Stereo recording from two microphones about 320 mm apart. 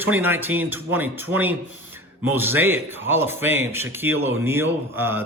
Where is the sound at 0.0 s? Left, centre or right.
Centre.